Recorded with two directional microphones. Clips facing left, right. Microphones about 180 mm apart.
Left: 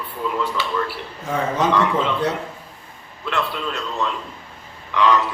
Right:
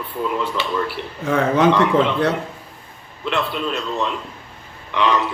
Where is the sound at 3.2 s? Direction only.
20° right (ahead or behind).